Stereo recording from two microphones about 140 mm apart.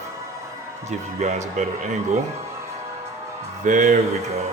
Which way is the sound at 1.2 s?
55° right (ahead or behind).